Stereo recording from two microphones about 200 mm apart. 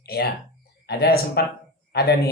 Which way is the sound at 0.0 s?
50° left (ahead or behind).